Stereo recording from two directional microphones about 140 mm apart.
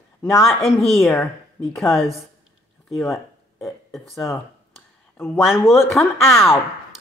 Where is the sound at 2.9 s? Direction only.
Centre (ahead or behind).